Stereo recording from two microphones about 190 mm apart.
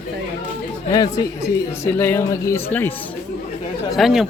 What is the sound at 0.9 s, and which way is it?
A woman's voice, 20° left (ahead or behind).